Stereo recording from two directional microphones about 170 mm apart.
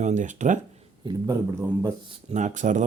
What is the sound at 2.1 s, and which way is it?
Speech, 45° right (ahead or behind).